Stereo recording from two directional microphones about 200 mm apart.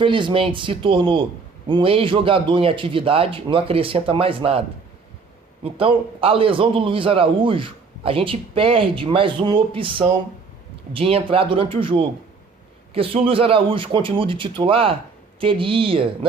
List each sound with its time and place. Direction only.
0.0 s a man's voice: 25° right (ahead or behind)
5.6 s a man's voice: 30° right (ahead or behind)